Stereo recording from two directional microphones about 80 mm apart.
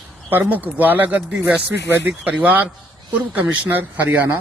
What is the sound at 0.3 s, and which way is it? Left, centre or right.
Speech, right.